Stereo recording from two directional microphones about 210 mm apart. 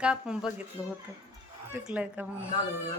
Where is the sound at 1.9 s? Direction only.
5° right (ahead or behind).